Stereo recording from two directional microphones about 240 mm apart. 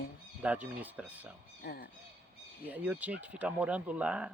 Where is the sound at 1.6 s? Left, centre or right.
Left.